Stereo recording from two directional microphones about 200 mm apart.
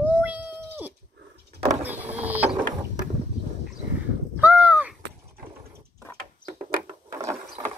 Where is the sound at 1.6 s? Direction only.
10° right (ahead or behind).